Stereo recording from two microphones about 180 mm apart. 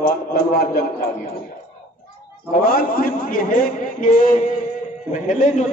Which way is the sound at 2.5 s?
55° left (ahead or behind).